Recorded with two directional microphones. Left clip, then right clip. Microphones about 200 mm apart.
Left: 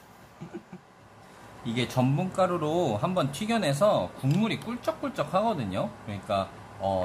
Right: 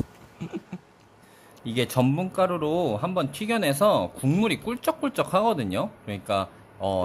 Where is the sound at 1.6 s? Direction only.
55° right (ahead or behind).